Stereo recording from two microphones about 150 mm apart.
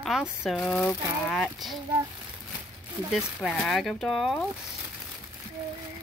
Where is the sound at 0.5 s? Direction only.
10° left (ahead or behind).